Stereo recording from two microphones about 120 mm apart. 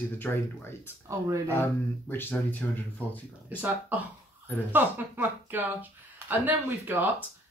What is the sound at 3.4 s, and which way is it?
Speech, 15° right (ahead or behind).